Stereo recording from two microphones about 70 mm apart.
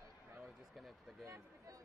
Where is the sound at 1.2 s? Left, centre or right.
Right.